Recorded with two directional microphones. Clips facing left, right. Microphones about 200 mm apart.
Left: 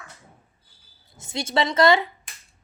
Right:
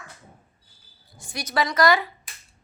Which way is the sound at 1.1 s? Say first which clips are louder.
Left 3 dB; 25° left (ahead or behind).